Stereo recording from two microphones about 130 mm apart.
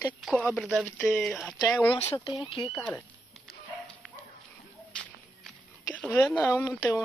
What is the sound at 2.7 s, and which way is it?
Speech, 15° left (ahead or behind).